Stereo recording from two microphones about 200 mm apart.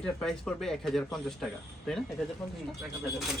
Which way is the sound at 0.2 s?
5° left (ahead or behind).